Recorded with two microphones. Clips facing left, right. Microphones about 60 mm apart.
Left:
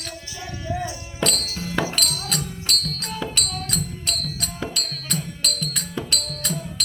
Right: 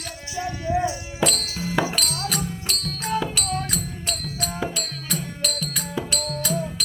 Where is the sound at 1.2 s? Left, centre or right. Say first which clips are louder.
Right 1 dB; centre.